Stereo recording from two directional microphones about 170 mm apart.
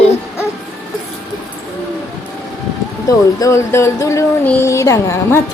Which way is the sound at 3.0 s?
20° left (ahead or behind).